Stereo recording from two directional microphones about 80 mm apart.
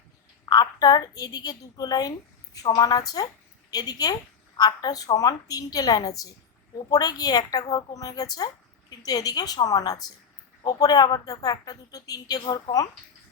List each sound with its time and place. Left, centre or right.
0.4 s a woman's voice: left
2.6 s a woman's voice: left